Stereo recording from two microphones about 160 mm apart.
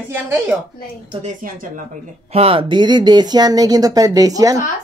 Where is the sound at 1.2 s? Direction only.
60° right (ahead or behind).